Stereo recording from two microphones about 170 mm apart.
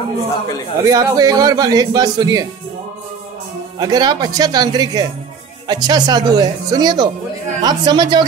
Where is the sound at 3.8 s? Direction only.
25° right (ahead or behind).